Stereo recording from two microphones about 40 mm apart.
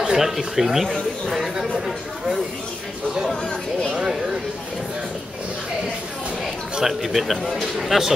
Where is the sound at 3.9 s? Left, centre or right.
Centre.